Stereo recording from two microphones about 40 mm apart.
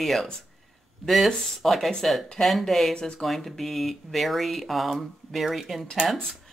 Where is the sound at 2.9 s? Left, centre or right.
Centre.